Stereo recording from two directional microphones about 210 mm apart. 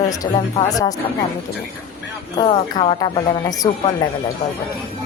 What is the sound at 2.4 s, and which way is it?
Speech, 20° left (ahead or behind).